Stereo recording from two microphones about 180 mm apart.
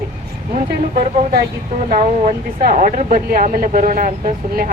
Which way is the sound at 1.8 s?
50° right (ahead or behind).